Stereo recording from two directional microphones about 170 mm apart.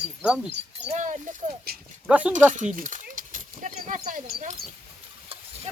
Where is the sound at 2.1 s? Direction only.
10° right (ahead or behind).